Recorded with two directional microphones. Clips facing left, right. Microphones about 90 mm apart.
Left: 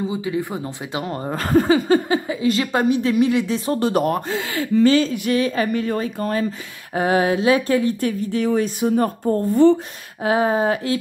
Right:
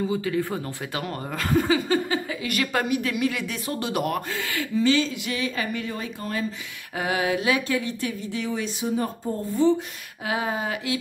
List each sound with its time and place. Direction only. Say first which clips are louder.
0.0 s a woman's voice: left 1 dB; 20° left (ahead or behind)
1.0 s speech: left 5 dB; 40° left (ahead or behind)
2.2 s a woman's voice: left 7 dB; 25° left (ahead or behind); by 6.4 s 45° left (ahead or behind)
7.0 s speech: left 7 dB; 35° left (ahead or behind); by 9.8 s 65° left (ahead or behind)
10.2 s speech: left 9 dB; 35° left (ahead or behind)